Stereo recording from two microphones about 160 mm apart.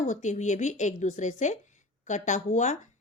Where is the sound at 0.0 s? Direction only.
50° left (ahead or behind).